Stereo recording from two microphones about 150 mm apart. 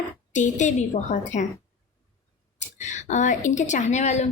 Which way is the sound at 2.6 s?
50° left (ahead or behind).